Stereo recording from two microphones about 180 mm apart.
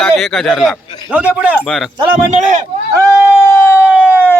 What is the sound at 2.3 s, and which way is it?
Speech, 40° right (ahead or behind).